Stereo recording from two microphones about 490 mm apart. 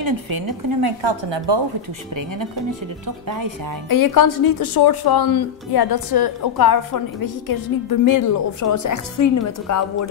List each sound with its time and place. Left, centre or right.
0.5 s a woman's voice: right
3.3 s speech: right
3.9 s a woman's voice: left